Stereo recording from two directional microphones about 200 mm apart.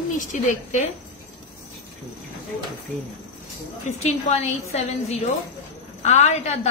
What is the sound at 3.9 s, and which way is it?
A woman's voice, 35° left (ahead or behind).